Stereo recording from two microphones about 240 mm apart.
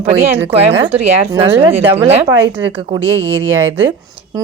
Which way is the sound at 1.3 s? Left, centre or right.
Centre.